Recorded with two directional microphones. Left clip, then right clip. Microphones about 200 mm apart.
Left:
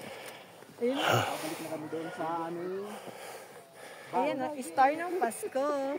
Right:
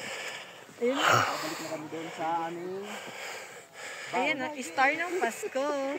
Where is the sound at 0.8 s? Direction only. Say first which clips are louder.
Right 4 dB; 25° left (ahead or behind).